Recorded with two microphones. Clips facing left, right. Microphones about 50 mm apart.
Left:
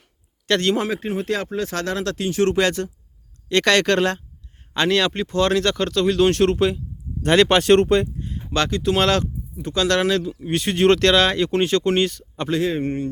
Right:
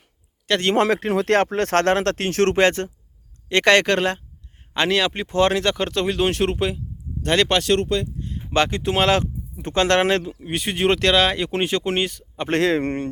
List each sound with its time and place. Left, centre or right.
0.8 s speech: right
2.6 s speech: right
3.5 s speech: right
6.1 s speech: centre
7.2 s speech: centre
7.6 s speech: left
8.5 s speech: right
9.6 s speech: right
10.4 s speech: centre
12.5 s speech: right